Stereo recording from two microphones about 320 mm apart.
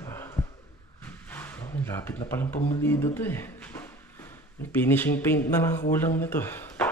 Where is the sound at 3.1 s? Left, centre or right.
Centre.